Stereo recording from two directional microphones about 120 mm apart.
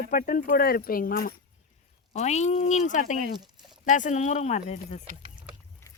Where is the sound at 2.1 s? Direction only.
70° left (ahead or behind); by 3.2 s 90° left.